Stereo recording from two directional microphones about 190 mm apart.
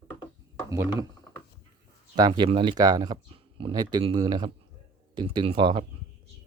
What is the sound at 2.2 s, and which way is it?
Speech, 25° right (ahead or behind).